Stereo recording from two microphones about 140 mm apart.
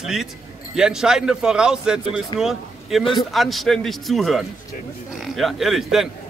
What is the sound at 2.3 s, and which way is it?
Speech, centre (ahead or behind).